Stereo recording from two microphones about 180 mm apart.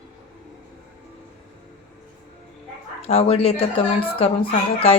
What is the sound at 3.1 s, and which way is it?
Speech, 35° left (ahead or behind).